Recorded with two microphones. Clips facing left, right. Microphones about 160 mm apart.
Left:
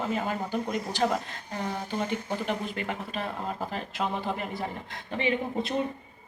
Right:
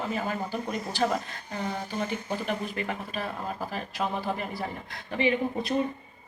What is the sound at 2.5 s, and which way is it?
A woman's voice, 20° left (ahead or behind).